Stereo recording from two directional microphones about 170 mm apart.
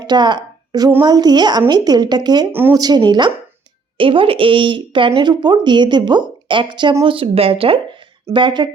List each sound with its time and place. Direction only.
0.0 s a woman's voice: 25° right (ahead or behind)
2.5 s speech: 10° right (ahead or behind)
2.8 s a woman's voice: 25° right (ahead or behind)